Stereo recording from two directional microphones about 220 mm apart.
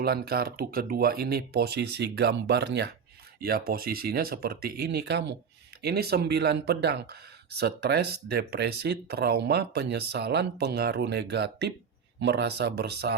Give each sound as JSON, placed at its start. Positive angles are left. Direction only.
{"t": 0.0, "sound": "speech", "side_deg": -45}